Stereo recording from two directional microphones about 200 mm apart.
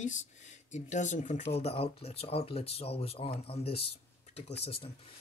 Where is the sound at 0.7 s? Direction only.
35° left (ahead or behind).